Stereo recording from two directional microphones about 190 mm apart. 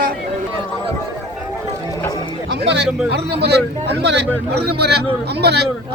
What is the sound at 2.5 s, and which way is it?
Speech, 60° right (ahead or behind).